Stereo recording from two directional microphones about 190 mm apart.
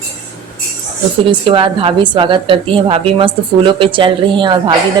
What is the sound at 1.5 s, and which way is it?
A woman's voice, 30° right (ahead or behind).